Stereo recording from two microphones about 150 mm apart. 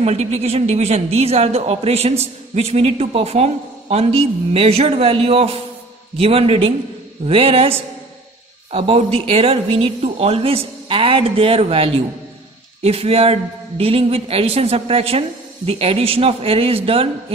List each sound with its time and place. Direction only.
0.0 s a man's voice: 45° right (ahead or behind)
8.7 s speech: 40° right (ahead or behind)